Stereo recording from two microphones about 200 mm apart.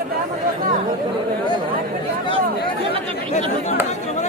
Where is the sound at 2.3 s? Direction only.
25° right (ahead or behind).